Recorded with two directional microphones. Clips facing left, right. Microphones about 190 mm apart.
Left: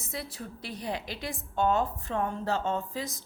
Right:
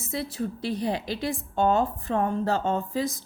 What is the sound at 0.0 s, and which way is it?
A woman's voice, 25° right (ahead or behind).